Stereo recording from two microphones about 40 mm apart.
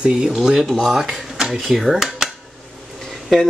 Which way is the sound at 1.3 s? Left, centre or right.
Centre.